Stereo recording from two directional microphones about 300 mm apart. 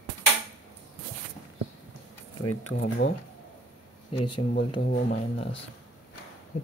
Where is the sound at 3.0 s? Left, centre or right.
Left.